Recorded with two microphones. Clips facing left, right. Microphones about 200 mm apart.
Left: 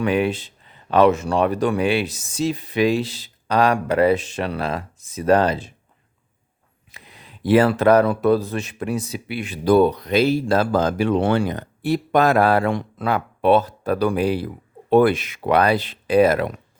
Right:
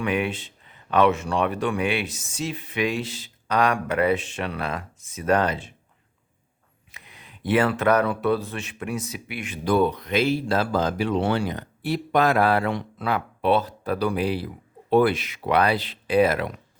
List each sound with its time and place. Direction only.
0.0 s speech: 35° left (ahead or behind)
6.9 s speech: 35° left (ahead or behind)